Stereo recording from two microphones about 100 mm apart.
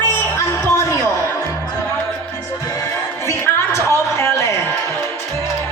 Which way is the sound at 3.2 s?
25° left (ahead or behind).